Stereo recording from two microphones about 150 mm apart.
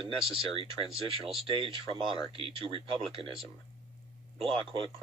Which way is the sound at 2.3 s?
35° right (ahead or behind).